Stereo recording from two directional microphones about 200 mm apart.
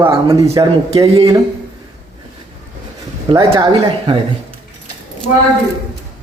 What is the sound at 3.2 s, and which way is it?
Speech, 25° right (ahead or behind).